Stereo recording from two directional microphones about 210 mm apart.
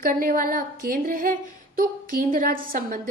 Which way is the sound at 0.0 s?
40° right (ahead or behind).